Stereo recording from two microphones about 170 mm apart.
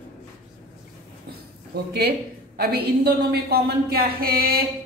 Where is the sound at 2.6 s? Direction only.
70° right (ahead or behind).